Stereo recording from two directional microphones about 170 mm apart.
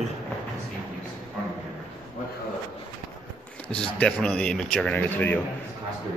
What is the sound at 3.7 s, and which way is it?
A man's voice, 5° left (ahead or behind).